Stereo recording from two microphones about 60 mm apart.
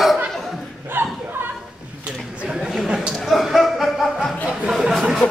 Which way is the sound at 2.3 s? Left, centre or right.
Right.